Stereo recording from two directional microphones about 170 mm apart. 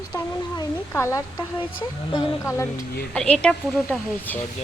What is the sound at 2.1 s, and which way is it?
Speech, 15° left (ahead or behind).